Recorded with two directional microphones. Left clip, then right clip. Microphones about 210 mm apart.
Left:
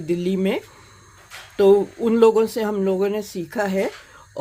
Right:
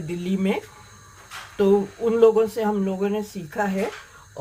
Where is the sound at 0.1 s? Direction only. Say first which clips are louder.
Left 4 dB; 45° left (ahead or behind).